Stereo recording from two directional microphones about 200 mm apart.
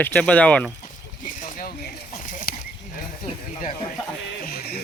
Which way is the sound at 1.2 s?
40° left (ahead or behind).